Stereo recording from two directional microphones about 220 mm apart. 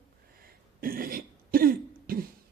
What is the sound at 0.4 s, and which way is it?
Cough, 40° right (ahead or behind).